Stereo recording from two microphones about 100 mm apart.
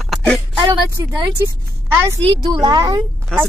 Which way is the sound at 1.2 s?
35° right (ahead or behind).